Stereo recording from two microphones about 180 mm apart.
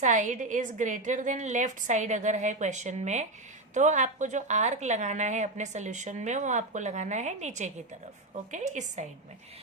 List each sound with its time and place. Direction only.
0.0 s a woman's voice: 45° right (ahead or behind)